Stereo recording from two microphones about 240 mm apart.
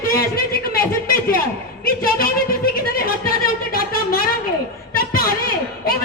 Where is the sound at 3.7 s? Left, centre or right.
Left.